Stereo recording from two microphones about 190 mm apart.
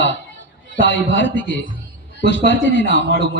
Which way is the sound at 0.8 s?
75° left (ahead or behind).